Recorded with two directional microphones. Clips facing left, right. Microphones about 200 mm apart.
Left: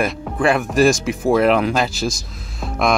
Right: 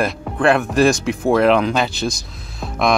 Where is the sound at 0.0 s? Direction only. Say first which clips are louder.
Right 1 dB; centre (ahead or behind).